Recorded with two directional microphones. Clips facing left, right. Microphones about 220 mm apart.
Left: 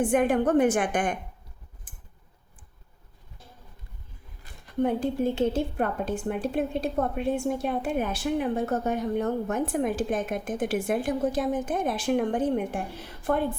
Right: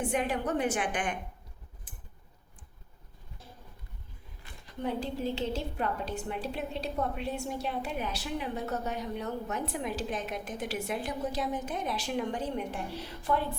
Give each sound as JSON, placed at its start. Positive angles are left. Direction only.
{"t": 0.0, "sound": "a woman's voice", "side_deg": 50}
{"t": 1.9, "sound": "a sound", "side_deg": 50}
{"t": 4.6, "sound": "a woman's voice", "side_deg": 50}